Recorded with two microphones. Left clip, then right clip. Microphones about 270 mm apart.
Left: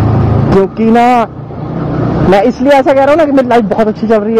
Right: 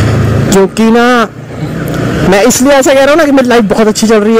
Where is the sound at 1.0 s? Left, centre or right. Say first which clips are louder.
Even; right.